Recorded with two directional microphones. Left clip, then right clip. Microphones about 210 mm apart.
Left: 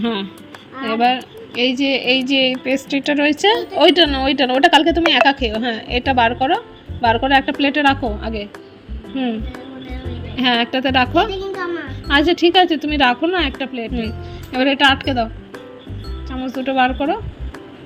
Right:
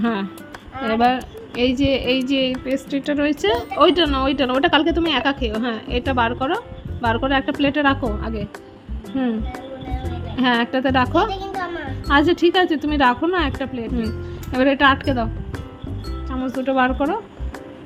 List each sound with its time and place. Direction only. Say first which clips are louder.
0.0 s a woman's voice: left 1 dB; 15° right (ahead or behind)
9.1 s speech: left 1 dB; 20° right (ahead or behind)
10.3 s a woman's voice: left 2 dB; 15° right (ahead or behind)
16.6 s a woman's voice: left 2 dB; 15° right (ahead or behind)